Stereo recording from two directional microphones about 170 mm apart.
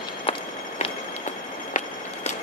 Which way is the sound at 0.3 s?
35° left (ahead or behind).